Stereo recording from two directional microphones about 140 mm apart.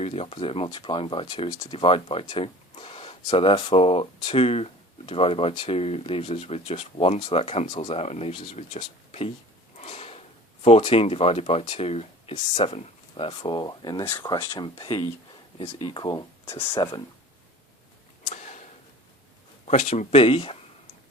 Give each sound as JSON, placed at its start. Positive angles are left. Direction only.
{"t": 0.0, "sound": "speech", "side_deg": 45}
{"t": 9.7, "sound": "gasp", "side_deg": 50}
{"t": 11.6, "sound": "speech", "side_deg": 40}
{"t": 16.5, "sound": "speech", "side_deg": 15}
{"t": 16.7, "sound": "speech", "side_deg": 35}
{"t": 19.6, "sound": "speech", "side_deg": 55}